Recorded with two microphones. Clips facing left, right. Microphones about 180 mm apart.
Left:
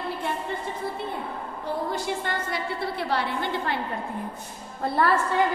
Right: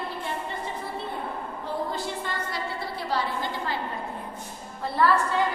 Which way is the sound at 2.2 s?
60° left (ahead or behind).